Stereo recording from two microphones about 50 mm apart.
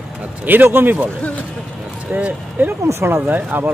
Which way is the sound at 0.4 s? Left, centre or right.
Right.